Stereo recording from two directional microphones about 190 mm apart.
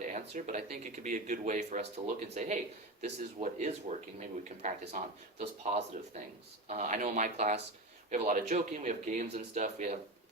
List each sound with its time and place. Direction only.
0.1 s speech: 40° right (ahead or behind)